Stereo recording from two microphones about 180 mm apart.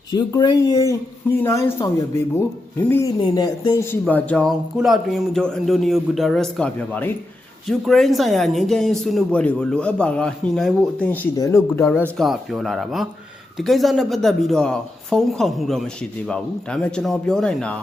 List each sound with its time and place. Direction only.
0.1 s speech: 25° left (ahead or behind)
3.2 s speech: 25° left (ahead or behind)
4.0 s speech: 5° left (ahead or behind)
11.1 s speech: 15° left (ahead or behind)
12.1 s speech: centre (ahead or behind)